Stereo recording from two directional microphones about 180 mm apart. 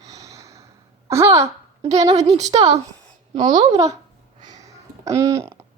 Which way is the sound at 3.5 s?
20° right (ahead or behind).